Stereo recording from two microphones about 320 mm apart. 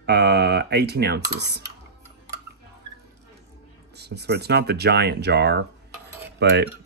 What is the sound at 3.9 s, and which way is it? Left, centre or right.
Speech, right.